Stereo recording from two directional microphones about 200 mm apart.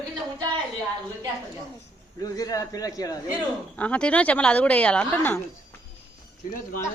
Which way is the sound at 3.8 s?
5° left (ahead or behind).